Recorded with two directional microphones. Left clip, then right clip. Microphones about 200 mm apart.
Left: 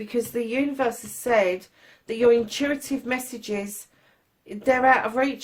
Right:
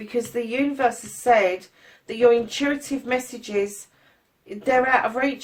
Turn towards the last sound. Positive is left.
turn(degrees=40)  # may be behind; listen again after turning